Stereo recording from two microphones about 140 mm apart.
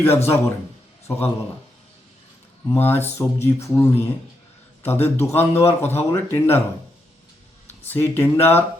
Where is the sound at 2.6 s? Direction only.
15° left (ahead or behind).